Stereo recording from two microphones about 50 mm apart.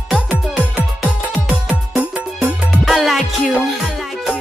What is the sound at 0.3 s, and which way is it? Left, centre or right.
Music, right.